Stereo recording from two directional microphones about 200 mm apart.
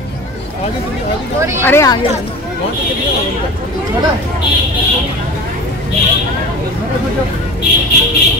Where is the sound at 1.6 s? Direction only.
15° left (ahead or behind).